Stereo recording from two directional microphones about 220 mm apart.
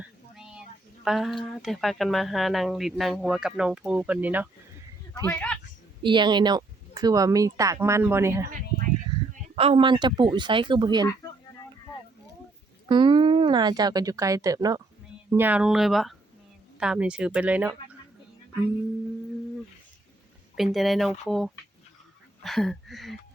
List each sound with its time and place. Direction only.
0.0 s a sound: 5° right (ahead or behind)
1.0 s speech: centre (ahead or behind)
5.2 s speech: 10° left (ahead or behind)
6.0 s speech: 20° right (ahead or behind)
9.3 s speech: 25° right (ahead or behind)
12.9 s speech: 20° right (ahead or behind); by 17.7 s 5° right (ahead or behind)
20.6 s speech: centre (ahead or behind)